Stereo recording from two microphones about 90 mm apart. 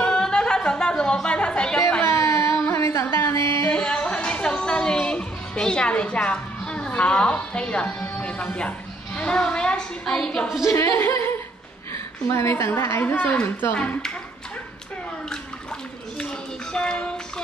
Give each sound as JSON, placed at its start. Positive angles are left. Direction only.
{"t": 0.0, "sound": "music", "side_deg": 10}
{"t": 2.0, "sound": "a sound", "side_deg": 35}
{"t": 3.3, "sound": "singing", "side_deg": -65}
{"t": 3.7, "sound": "music", "side_deg": 10}
{"t": 8.2, "sound": "a woman's voice", "side_deg": 10}
{"t": 10.6, "sound": "a woman's voice", "side_deg": 35}
{"t": 16.2, "sound": "a sound", "side_deg": 10}